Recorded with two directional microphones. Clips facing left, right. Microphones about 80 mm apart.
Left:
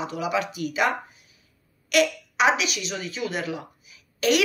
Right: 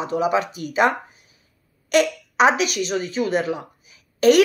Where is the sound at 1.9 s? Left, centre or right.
Right.